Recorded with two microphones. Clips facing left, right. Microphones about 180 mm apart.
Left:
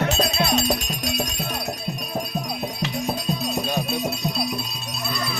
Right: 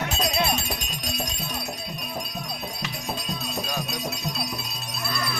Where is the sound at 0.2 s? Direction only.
75° left (ahead or behind).